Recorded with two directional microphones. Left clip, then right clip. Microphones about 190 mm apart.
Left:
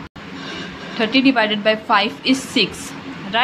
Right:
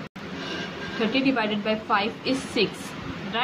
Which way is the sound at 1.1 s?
30° left (ahead or behind).